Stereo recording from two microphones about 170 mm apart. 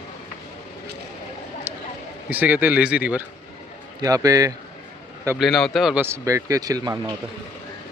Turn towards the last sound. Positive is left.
turn(degrees=-20)  # may be behind; listen again after turning